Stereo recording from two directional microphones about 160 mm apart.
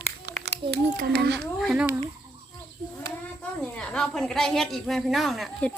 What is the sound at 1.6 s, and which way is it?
Speech, centre (ahead or behind).